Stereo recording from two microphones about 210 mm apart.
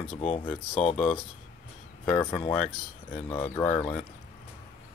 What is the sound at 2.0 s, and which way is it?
Speech, 5° left (ahead or behind).